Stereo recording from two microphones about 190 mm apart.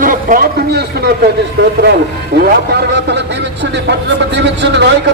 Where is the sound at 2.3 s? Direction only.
60° right (ahead or behind).